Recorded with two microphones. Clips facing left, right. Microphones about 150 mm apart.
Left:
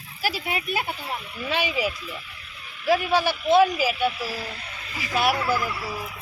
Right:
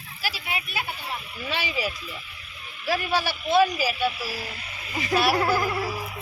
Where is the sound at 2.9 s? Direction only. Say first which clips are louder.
Left 4 dB; 15° left (ahead or behind).